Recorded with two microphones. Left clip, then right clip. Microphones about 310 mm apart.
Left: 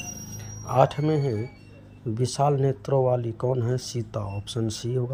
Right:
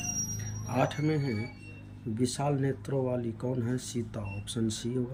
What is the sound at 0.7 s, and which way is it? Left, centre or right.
Speech, centre.